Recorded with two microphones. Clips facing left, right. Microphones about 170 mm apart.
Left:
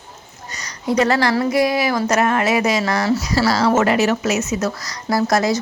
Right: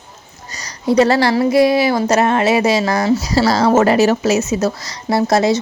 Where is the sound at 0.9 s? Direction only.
30° right (ahead or behind).